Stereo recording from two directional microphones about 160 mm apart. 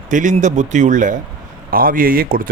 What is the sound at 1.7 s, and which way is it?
Speech, 65° right (ahead or behind).